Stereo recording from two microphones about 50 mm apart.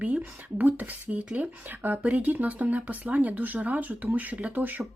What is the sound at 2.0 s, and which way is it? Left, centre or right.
Speech, right.